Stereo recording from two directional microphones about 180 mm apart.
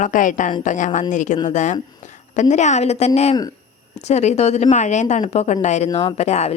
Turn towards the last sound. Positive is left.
turn(degrees=35)  # may be behind; listen again after turning